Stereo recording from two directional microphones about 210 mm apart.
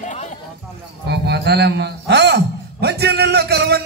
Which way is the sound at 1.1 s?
50° right (ahead or behind).